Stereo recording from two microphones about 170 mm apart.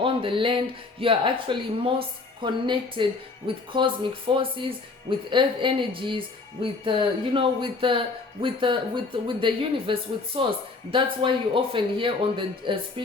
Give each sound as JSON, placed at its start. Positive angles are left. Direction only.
{"t": 0.0, "sound": "speech", "side_deg": -30}